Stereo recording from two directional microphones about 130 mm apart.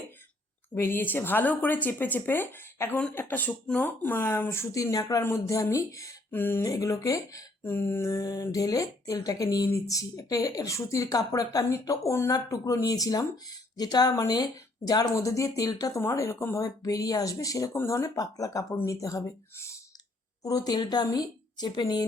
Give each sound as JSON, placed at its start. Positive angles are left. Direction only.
{"t": 0.7, "sound": "a woman's voice", "side_deg": 15}